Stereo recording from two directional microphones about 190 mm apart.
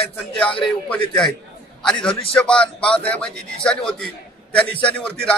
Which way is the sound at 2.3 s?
5° left (ahead or behind).